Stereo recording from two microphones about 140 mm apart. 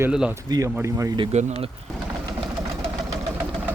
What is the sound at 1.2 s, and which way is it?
Speech, 55° right (ahead or behind).